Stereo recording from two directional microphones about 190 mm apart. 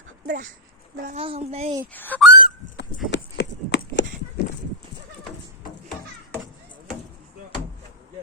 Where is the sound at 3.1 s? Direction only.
70° left (ahead or behind).